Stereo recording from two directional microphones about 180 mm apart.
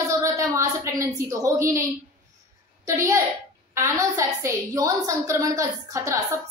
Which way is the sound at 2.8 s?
15° right (ahead or behind).